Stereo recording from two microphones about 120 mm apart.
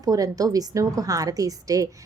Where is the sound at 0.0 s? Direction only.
30° right (ahead or behind).